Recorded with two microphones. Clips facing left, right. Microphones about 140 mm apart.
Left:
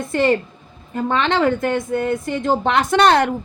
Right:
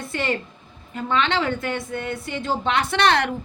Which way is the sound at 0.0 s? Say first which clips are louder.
Left 8 dB; 40° left (ahead or behind).